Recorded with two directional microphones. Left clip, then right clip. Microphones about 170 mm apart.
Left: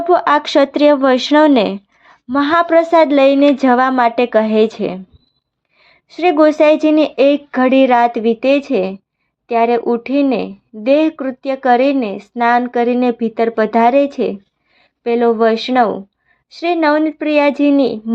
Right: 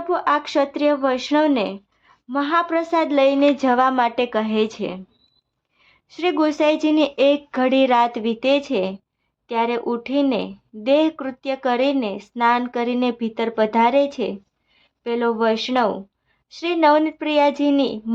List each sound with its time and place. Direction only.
0.0 s a woman's voice: 35° left (ahead or behind); by 18.1 s 20° left (ahead or behind)